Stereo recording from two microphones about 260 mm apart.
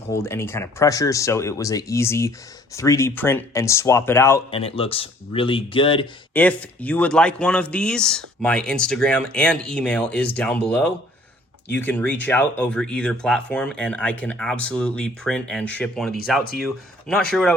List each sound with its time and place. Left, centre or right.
0.1 s speech: centre
4.5 s speech: left
6.3 s speech: centre